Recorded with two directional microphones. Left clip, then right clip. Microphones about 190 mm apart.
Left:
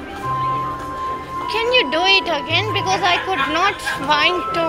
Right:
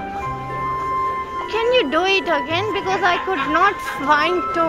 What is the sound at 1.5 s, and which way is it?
A woman's voice, 50° right (ahead or behind).